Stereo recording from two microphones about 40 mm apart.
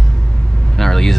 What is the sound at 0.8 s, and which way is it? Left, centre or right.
Vehicle, centre.